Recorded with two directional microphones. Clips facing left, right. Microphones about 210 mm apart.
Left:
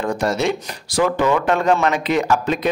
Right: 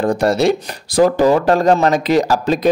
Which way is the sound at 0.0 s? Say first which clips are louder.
Right 5 dB; 35° right (ahead or behind).